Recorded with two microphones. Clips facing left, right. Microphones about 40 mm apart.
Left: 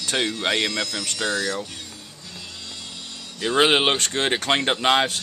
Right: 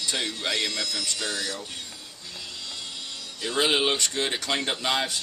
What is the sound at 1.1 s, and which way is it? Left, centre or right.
Speech, left.